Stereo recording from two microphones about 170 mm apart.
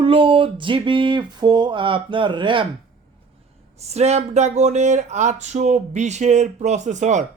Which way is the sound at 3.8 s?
40° right (ahead or behind).